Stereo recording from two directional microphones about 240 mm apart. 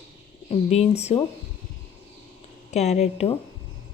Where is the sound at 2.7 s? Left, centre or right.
Left.